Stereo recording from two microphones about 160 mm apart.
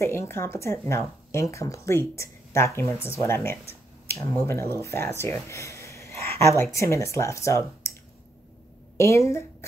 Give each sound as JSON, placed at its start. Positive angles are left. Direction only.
{"t": 0.0, "sound": "speech", "side_deg": 15}